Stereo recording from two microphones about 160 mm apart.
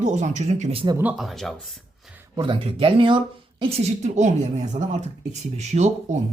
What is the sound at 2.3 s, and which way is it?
A woman's voice, 30° right (ahead or behind).